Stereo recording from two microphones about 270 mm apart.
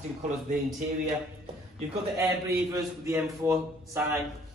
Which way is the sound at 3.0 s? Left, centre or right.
Centre.